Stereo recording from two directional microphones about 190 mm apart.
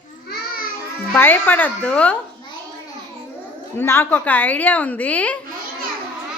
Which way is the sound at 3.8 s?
10° left (ahead or behind).